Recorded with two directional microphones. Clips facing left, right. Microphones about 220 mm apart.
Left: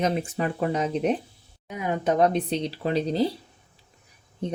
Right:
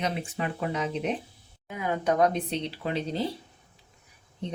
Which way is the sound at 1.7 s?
20° left (ahead or behind).